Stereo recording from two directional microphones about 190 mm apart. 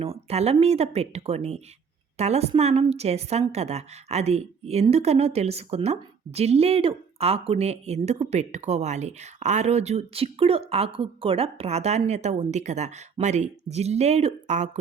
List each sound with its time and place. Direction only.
0.0 s a woman's voice: 30° right (ahead or behind)